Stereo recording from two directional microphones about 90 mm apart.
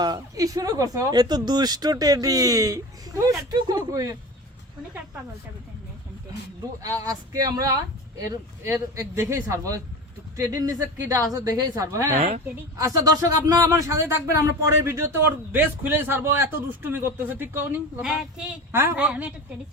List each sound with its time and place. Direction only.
0.0 s speech: 45° right (ahead or behind)
3.5 s speech: 50° right (ahead or behind)
6.8 s speech: 45° right (ahead or behind)
8.6 s a man's voice: 30° right (ahead or behind)
18.0 s speech: 5° right (ahead or behind)
18.7 s speech: 25° right (ahead or behind)
18.9 s speech: 15° right (ahead or behind)